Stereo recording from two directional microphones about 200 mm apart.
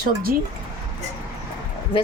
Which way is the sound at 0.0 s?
45° right (ahead or behind).